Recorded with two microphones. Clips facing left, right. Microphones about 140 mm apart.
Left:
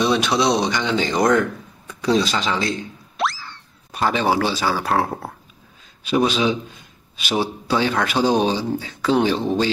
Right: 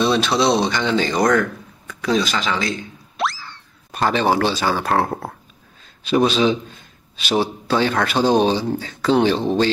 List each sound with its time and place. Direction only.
0.0 s speech: 15° left (ahead or behind)
1.9 s speech: 30° left (ahead or behind)
3.2 s boing: centre (ahead or behind)
6.0 s speech: 10° left (ahead or behind)